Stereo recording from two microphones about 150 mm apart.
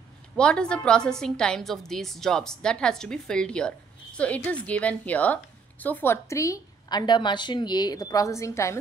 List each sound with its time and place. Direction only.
0.4 s a woman's voice: 5° left (ahead or behind)